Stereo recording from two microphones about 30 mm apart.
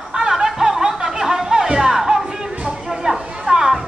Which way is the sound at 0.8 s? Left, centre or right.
Centre.